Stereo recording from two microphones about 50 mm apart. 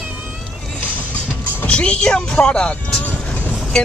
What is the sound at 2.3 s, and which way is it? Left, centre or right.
Vehicle, left.